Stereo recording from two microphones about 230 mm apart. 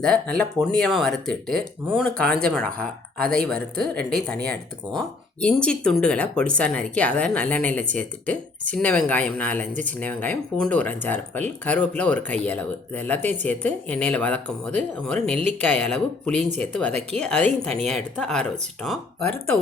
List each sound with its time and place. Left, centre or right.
0.0 s speech: centre
16.3 s speech: right
16.6 s speech: centre